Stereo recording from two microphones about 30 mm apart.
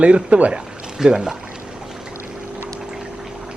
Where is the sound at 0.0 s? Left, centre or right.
Right.